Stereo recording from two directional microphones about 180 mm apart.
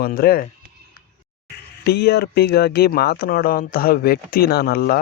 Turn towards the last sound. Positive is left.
turn(degrees=60)  # may be behind; listen again after turning